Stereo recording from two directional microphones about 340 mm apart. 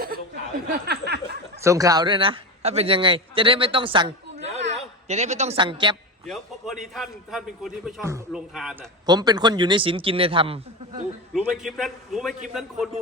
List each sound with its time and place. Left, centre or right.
0.9 s snicker: right
1.6 s a man's voice: centre
6.2 s a man's voice: centre
11.3 s a man's voice: centre